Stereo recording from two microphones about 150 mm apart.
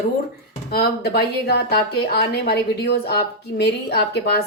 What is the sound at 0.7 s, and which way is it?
Speech, 90° left.